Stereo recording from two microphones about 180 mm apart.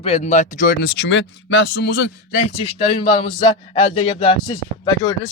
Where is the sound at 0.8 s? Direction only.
80° left.